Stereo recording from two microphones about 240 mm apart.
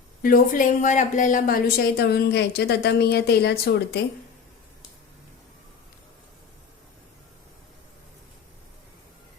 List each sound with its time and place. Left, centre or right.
0.2 s speech: left